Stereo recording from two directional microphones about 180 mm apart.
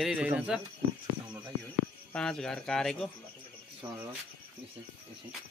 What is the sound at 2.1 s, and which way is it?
Speech, 5° left (ahead or behind).